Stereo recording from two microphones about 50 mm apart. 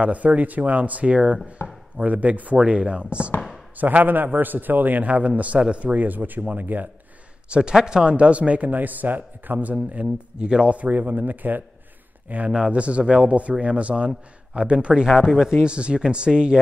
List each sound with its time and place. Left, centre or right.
0.0 s a man's voice: right
1.6 s chopping: left
2.0 s speech: right
3.7 s a man's voice: right
7.4 s speech: centre
10.4 s speech: centre
10.8 s a man's voice: right
12.4 s speech: centre